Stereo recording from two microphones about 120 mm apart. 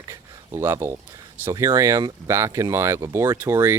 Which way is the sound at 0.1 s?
20° right (ahead or behind).